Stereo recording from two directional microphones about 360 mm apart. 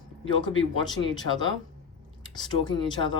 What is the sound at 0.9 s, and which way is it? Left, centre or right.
Speech, centre.